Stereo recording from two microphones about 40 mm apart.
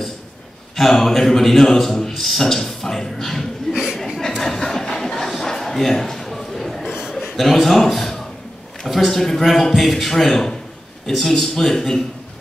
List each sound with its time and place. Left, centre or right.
0.7 s a man's voice: centre
3.7 s chuckle: centre
4.4 s a sound: centre
7.5 s a man's voice: centre